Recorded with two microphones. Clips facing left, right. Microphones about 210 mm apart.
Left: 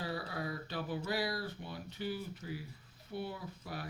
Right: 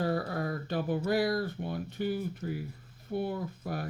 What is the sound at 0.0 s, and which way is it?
Speech, 50° right (ahead or behind).